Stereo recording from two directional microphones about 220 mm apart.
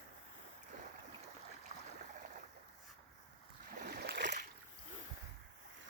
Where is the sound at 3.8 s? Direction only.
45° right (ahead or behind).